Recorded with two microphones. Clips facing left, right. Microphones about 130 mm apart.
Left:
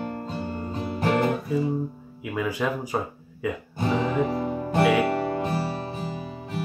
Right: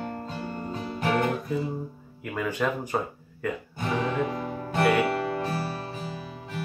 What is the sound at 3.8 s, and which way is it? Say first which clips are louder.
Music: left 4 dB; 30° left (ahead or behind).